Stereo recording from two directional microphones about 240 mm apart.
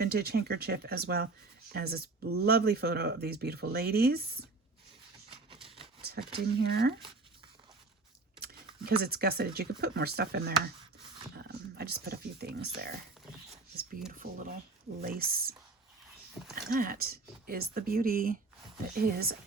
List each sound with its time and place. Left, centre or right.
0.0 s speech: right
5.6 s a sound: right
6.0 s a sound: right
6.6 s speech: right
8.4 s speech: right
14.2 s speech: right
16.6 s speech: right